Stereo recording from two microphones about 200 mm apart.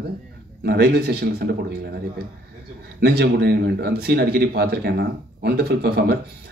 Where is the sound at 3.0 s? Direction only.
55° right (ahead or behind).